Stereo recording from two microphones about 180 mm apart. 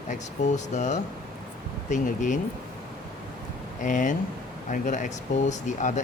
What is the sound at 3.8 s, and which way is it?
Speech, 45° left (ahead or behind).